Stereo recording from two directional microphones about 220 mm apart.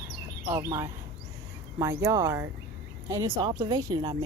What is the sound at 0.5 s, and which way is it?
Speech, 15° right (ahead or behind).